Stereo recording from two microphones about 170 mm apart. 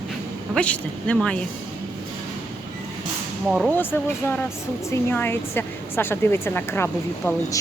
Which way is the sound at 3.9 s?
15° left (ahead or behind).